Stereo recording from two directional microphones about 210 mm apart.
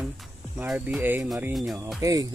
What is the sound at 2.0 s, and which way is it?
Speech, 15° right (ahead or behind).